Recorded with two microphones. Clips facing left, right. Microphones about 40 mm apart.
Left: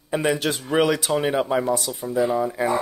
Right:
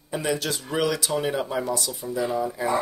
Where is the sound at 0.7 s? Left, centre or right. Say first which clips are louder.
Left 5 dB; left.